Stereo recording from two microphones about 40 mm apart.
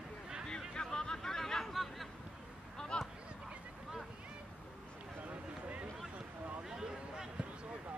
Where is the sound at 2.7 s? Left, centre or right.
Centre.